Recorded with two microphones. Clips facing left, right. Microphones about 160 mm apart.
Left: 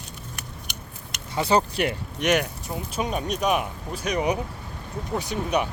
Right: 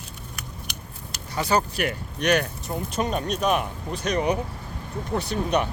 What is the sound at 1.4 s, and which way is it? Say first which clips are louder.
Speech: left 2 dB; 25° left (ahead or behind).